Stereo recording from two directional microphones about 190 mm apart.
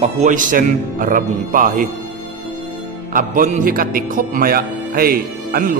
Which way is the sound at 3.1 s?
45° right (ahead or behind).